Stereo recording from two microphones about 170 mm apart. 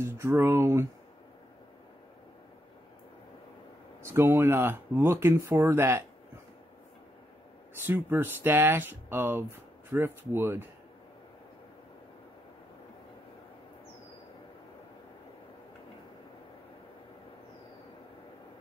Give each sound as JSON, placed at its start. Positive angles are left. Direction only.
{"t": 0.0, "sound": "speech", "side_deg": -15}
{"t": 4.0, "sound": "speech", "side_deg": -15}
{"t": 7.8, "sound": "speech", "side_deg": -10}